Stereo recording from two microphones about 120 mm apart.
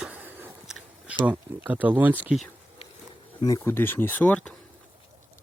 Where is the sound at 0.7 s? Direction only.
10° right (ahead or behind).